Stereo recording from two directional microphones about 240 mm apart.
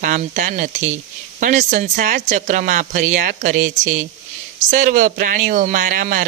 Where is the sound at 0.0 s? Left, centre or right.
Right.